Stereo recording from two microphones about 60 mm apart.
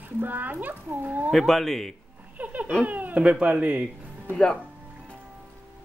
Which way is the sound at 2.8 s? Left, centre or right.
Right.